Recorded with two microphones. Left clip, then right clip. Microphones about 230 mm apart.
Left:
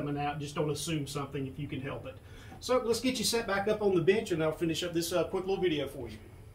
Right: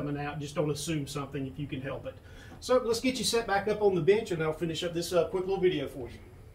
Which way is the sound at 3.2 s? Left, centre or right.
Left.